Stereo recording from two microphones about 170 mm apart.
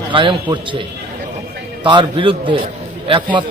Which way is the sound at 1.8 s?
30° right (ahead or behind).